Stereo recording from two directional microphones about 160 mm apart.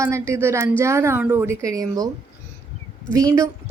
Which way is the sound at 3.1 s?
20° right (ahead or behind).